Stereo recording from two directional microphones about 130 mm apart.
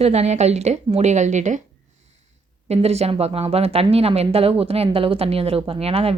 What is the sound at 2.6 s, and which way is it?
A woman's voice, 55° right (ahead or behind).